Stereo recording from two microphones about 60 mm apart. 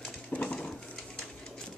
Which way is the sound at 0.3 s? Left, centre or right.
Left.